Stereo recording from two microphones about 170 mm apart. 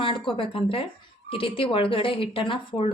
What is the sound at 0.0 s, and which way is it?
A woman's voice, 30° left (ahead or behind).